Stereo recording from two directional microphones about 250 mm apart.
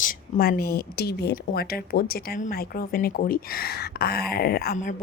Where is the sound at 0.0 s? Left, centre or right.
Left.